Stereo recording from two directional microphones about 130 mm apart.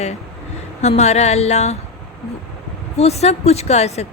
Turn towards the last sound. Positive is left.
turn(degrees=55)  # may be behind; listen again after turning